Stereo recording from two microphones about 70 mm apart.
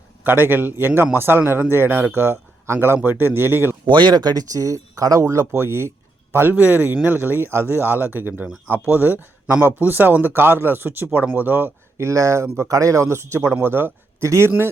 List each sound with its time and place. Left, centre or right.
0.3 s a man's voice: right
4.0 s speech: right
5.5 s a man's voice: right
6.3 s a man's voice: right
11.9 s a man's voice: right
14.2 s speech: right